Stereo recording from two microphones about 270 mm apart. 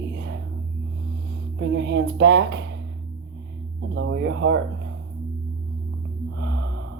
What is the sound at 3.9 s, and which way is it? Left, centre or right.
Speech, right.